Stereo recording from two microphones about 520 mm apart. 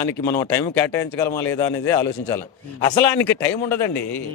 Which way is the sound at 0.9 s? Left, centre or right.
Left.